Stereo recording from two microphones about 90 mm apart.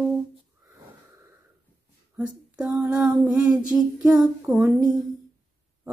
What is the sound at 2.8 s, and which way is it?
Speech, 20° right (ahead or behind).